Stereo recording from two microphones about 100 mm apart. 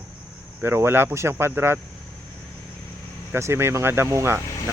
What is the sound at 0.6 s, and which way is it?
A man's voice, 25° right (ahead or behind).